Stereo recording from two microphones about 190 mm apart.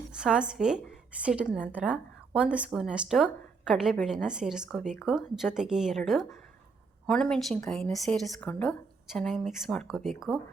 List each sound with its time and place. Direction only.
0.2 s a woman's voice: 5° right (ahead or behind)